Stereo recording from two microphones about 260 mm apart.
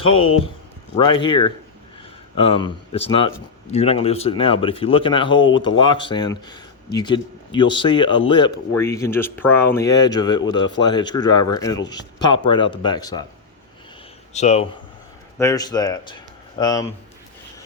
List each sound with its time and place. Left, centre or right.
0.0 s speech: left
0.9 s speech: centre
14.3 s speech: left
15.4 s speech: centre